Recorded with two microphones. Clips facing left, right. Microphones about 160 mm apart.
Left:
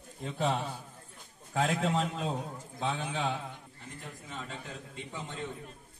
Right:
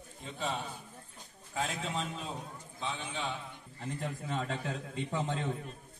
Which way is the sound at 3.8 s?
60° right (ahead or behind).